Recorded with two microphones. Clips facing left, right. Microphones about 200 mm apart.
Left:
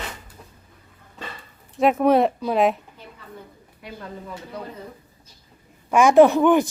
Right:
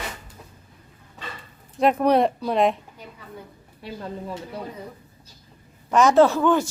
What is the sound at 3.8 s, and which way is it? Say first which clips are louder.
Speech: right 3 dB; 30° right (ahead or behind).